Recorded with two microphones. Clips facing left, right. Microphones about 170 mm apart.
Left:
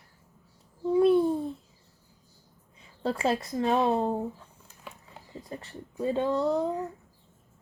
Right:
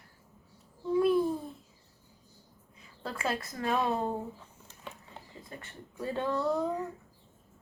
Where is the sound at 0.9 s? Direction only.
30° left (ahead or behind).